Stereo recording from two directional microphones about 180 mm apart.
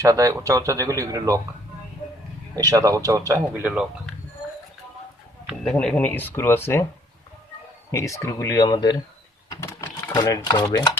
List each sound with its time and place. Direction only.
0.0 s speech: 15° right (ahead or behind)
2.6 s speech: 20° right (ahead or behind)
5.7 s speech: 5° left (ahead or behind)
7.9 s speech: 15° left (ahead or behind)
9.5 s sewing machine: 15° left (ahead or behind)
10.1 s speech: 25° left (ahead or behind)